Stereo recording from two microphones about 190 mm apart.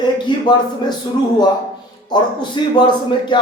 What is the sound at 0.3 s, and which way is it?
Speech, 20° left (ahead or behind).